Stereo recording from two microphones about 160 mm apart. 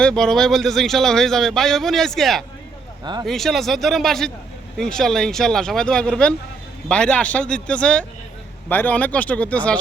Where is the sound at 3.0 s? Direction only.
25° right (ahead or behind).